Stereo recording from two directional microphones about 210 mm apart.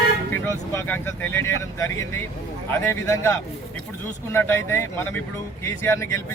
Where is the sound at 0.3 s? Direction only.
10° left (ahead or behind).